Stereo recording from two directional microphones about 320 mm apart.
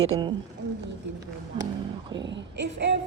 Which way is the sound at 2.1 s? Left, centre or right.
Right.